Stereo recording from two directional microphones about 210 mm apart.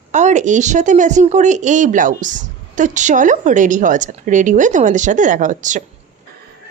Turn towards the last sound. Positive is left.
turn(degrees=-35)  # may be behind; listen again after turning